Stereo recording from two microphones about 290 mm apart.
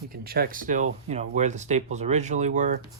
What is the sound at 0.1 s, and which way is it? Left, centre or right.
Speech, right.